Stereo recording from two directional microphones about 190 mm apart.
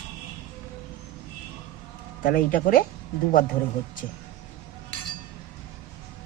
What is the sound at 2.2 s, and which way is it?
Speech, 45° left (ahead or behind).